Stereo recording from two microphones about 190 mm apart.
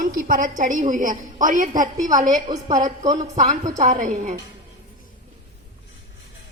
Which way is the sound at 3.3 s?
40° right (ahead or behind).